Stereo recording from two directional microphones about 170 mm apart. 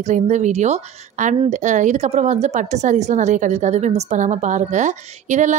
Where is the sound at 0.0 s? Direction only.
45° right (ahead or behind).